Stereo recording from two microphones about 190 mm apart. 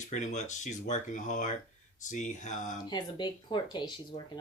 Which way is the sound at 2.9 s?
25° left (ahead or behind).